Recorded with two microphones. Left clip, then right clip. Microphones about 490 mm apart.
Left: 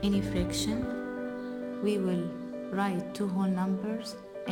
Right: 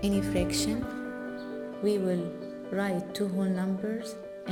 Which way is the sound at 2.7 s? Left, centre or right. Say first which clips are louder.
Right 1 dB; centre.